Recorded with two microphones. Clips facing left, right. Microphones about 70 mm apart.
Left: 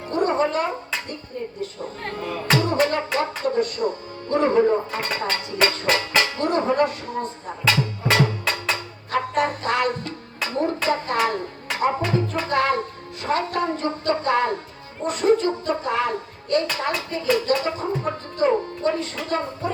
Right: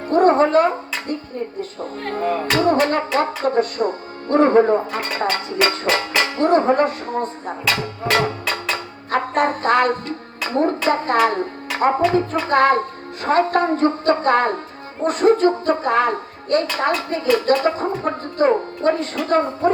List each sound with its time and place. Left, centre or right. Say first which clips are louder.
0.1 s music: right 7 dB; right
2.1 s a woman's voice: right 4 dB; right
8.7 s music: right 3 dB; right
10.5 s a woman's voice: right 5 dB; right